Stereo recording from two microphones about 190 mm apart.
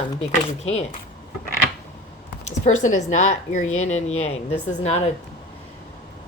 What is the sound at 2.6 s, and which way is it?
A woman's voice, 40° left (ahead or behind).